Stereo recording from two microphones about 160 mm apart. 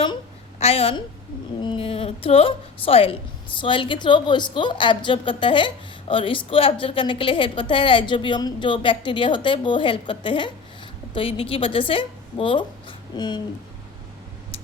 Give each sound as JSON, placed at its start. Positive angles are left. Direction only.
{"t": 0.6, "sound": "a woman's voice", "side_deg": 40}